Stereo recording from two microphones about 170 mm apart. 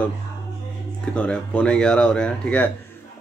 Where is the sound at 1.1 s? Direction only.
5° left (ahead or behind).